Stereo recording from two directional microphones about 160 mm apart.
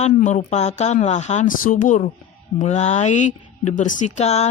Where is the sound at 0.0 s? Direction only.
50° left (ahead or behind).